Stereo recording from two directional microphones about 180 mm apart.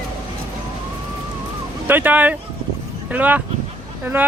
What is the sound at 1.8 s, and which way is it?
Speech, 10° right (ahead or behind).